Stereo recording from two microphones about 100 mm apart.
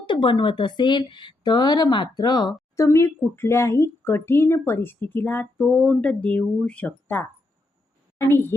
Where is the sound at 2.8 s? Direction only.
25° left (ahead or behind).